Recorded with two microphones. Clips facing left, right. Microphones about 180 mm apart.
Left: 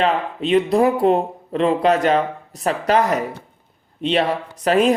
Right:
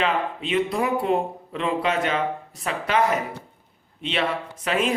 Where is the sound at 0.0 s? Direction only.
40° left (ahead or behind).